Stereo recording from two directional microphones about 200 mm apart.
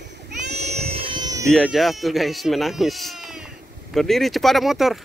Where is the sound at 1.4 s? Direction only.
Centre (ahead or behind).